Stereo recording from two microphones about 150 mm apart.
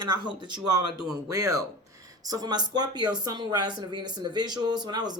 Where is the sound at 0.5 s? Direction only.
30° right (ahead or behind).